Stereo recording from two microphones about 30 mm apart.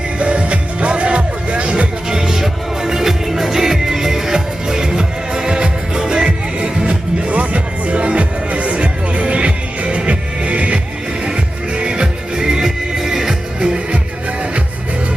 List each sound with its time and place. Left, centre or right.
0.2 s music: right
2.0 s music: right
6.2 s music: right
11.3 s music: right
12.6 s music: centre
13.6 s music: right